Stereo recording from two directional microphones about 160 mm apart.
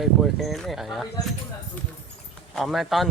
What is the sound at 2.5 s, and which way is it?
Speech, centre (ahead or behind).